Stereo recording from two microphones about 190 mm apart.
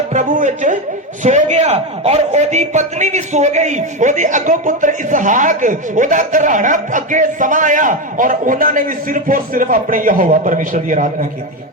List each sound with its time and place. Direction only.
0.1 s a man's voice: 45° right (ahead or behind)